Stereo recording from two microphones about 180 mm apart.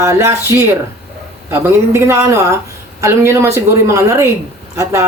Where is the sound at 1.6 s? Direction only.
15° right (ahead or behind).